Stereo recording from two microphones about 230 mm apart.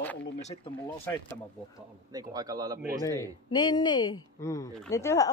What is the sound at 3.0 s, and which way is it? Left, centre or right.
A woman's voice, centre.